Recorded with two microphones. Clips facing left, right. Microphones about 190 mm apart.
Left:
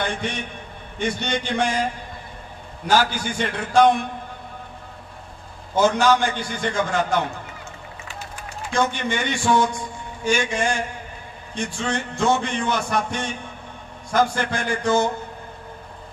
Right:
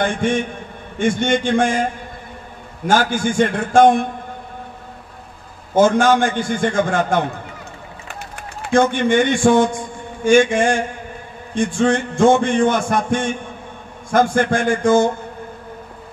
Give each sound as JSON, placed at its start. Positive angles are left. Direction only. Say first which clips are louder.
{"t": 0.0, "sound": "a man's voice", "louder": "right 8 dB", "side_deg": -50}
{"t": 2.9, "sound": "a man's voice", "louder": "right 4 dB", "side_deg": -50}
{"t": 5.8, "sound": "a man's voice", "louder": "right 5 dB", "side_deg": -50}